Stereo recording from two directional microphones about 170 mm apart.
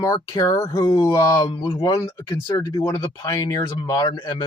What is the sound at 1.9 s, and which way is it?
Speech, 20° left (ahead or behind).